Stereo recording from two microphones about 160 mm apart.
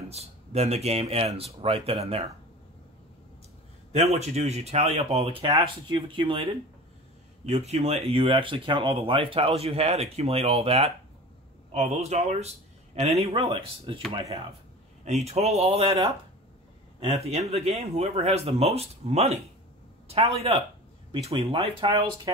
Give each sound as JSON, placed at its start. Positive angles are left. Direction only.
{"t": 0.1, "sound": "speech", "side_deg": -40}
{"t": 3.9, "sound": "speech", "side_deg": -45}
{"t": 15.0, "sound": "speech", "side_deg": -45}